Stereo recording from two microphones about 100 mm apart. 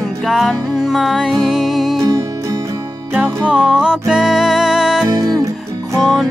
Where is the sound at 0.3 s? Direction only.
Centre (ahead or behind).